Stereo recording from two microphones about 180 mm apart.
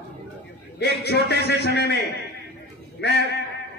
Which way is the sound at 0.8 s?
65° left (ahead or behind).